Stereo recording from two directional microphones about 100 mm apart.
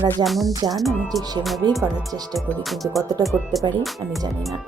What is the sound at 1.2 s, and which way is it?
Music, 40° right (ahead or behind).